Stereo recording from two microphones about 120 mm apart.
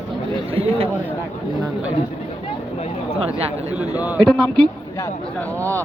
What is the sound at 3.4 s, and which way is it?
Speech, 60° right (ahead or behind).